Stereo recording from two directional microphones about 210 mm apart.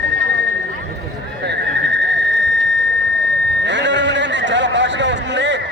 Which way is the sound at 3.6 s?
60° right (ahead or behind).